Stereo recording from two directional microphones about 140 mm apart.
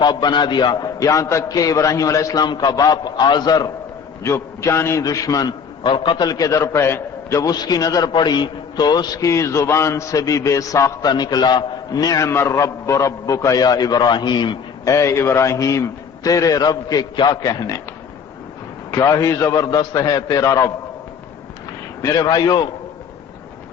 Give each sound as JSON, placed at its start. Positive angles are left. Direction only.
{"t": 0.0, "sound": "a man's voice", "side_deg": 30}
{"t": 14.8, "sound": "a man's voice", "side_deg": 20}
{"t": 18.9, "sound": "a man's voice", "side_deg": 25}
{"t": 22.0, "sound": "a man's voice", "side_deg": 25}